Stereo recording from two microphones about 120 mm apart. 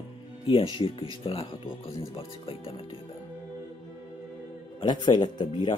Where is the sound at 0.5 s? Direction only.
45° left (ahead or behind).